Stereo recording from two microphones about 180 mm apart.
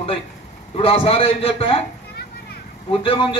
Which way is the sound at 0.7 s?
30° left (ahead or behind).